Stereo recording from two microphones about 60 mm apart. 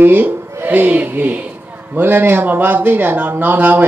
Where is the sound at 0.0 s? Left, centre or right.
Right.